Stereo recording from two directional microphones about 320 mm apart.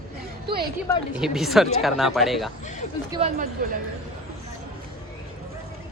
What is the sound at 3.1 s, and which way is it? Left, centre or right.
Speech, centre.